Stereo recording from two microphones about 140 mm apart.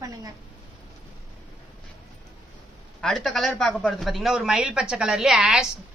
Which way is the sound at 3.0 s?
5° left (ahead or behind).